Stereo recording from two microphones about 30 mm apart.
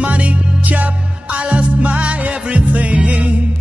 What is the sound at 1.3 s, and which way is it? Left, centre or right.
Music, right.